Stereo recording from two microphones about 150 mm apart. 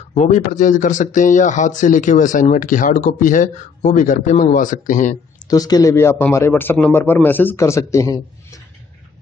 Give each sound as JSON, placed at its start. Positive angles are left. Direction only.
{"t": 0.0, "sound": "speech", "side_deg": 50}
{"t": 5.5, "sound": "a man's voice", "side_deg": 25}